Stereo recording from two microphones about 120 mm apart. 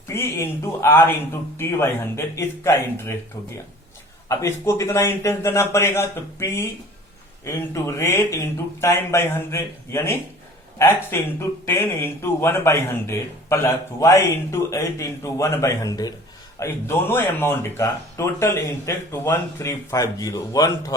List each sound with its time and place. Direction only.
0.1 s speech: 20° left (ahead or behind)
4.3 s speech: 25° left (ahead or behind)
16.6 s speech: 20° left (ahead or behind)